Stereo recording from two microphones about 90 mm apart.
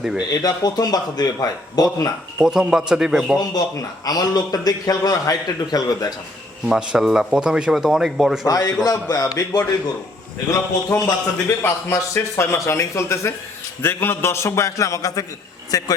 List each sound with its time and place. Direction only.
0.0 s speech: 5° right (ahead or behind)
0.3 s a man's voice: 45° left (ahead or behind)
2.4 s speech: 5° right (ahead or behind)
3.4 s a man's voice: 45° left (ahead or behind)
6.7 s speech: 10° right (ahead or behind)
8.4 s a man's voice: 45° left (ahead or behind)